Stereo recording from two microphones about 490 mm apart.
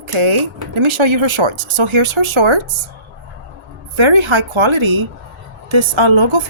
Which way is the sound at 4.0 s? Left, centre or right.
Right.